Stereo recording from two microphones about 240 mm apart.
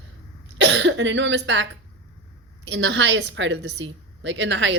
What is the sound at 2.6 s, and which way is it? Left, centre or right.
A woman's voice, right.